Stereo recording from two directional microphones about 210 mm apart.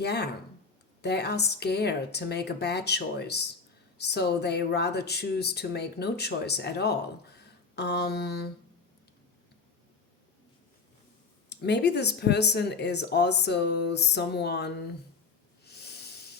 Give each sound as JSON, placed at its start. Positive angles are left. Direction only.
{"t": 0.0, "sound": "speech", "side_deg": 50}
{"t": 11.4, "sound": "speech", "side_deg": 55}
{"t": 15.6, "sound": "hiss", "side_deg": 50}